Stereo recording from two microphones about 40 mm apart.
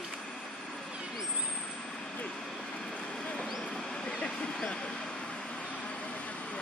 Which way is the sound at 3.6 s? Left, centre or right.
Centre.